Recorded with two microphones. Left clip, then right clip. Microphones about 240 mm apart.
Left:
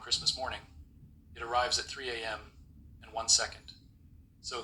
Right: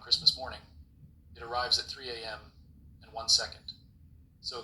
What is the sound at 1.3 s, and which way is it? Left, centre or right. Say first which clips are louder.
A man's voice: even; centre.